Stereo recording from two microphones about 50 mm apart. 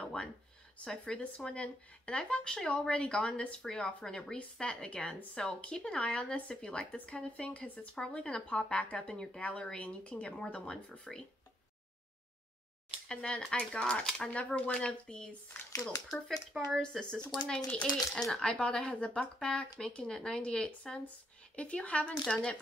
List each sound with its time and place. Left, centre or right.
0.0 s a sound: centre
0.8 s speech: centre
9.8 s speech: left
10.4 s speech: centre
13.1 s speech: centre
16.1 s speech: centre
17.1 s speech: centre